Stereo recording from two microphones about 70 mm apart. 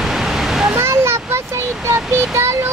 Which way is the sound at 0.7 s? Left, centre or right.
Right.